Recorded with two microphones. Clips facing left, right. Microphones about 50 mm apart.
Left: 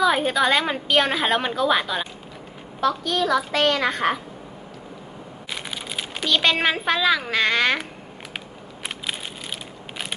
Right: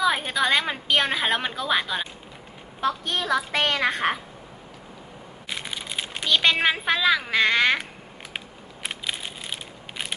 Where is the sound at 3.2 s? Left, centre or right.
Centre.